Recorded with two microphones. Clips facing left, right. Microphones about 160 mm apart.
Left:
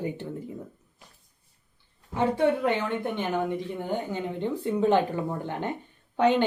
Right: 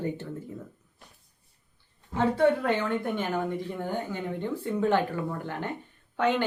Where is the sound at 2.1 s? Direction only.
15° left (ahead or behind).